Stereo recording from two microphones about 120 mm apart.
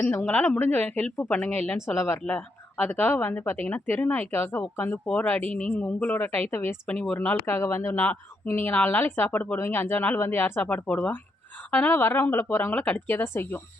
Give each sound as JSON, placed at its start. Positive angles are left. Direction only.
{"t": 0.1, "sound": "a woman's voice", "side_deg": 10}
{"t": 1.7, "sound": "a woman's voice", "side_deg": 20}